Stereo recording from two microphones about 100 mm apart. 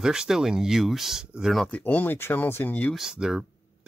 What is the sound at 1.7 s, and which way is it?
Speech, 20° left (ahead or behind).